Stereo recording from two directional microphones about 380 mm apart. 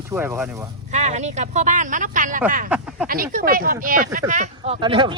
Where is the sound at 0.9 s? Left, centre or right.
Centre.